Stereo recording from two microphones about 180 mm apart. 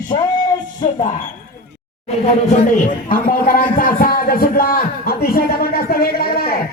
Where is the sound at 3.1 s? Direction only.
50° left (ahead or behind).